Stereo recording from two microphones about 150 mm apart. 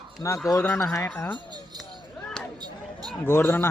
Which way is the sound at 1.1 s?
10° left (ahead or behind).